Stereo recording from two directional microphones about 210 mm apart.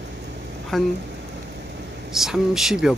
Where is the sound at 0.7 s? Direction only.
Centre (ahead or behind).